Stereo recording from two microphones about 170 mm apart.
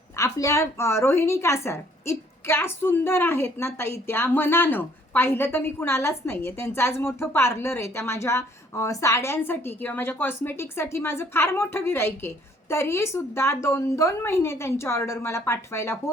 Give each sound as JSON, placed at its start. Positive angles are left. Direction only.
{"t": 0.2, "sound": "a woman's voice", "side_deg": 20}